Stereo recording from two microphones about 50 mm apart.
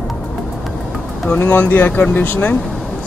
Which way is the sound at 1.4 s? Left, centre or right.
Left.